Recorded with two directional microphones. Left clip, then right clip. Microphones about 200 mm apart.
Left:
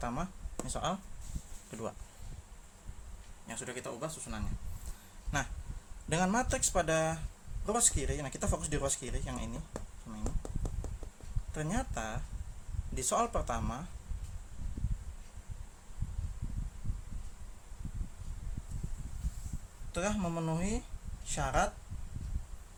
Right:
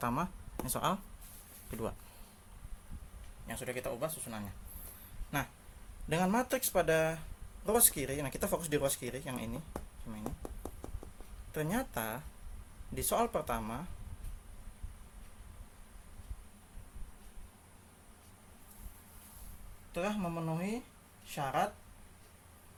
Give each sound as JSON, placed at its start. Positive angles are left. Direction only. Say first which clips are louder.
{"t": 0.0, "sound": "speech", "louder": "right 3 dB", "side_deg": -20}
{"t": 3.4, "sound": "speech", "louder": "right 2 dB", "side_deg": -10}
{"t": 10.2, "sound": "a sound", "louder": "even", "side_deg": -15}
{"t": 11.5, "sound": "speech", "louder": "right 1 dB", "side_deg": -15}
{"t": 19.9, "sound": "speech", "louder": "left 1 dB", "side_deg": 15}